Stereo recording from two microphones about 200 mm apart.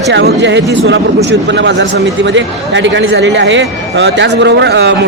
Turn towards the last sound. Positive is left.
turn(degrees=-60)  # may be behind; listen again after turning